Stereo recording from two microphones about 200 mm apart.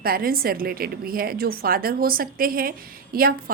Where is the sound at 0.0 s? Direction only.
50° right (ahead or behind).